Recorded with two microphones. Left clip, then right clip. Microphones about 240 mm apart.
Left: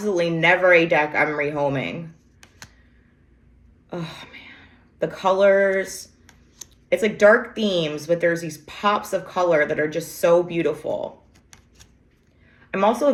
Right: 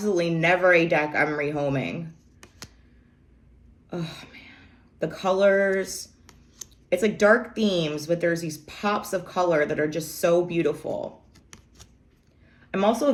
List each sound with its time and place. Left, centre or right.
0.0 s speech: centre
3.8 s a sound: centre
5.4 s speech: centre
6.6 s a sound: centre
7.2 s speech: centre
12.7 s speech: centre